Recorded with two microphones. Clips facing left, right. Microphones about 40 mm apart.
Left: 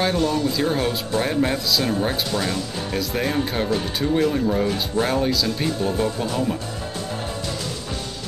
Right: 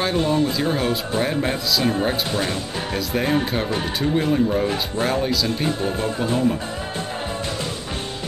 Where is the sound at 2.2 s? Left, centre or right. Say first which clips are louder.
Even; right.